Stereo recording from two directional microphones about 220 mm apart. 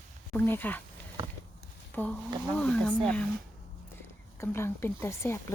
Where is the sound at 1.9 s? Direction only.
5° left (ahead or behind).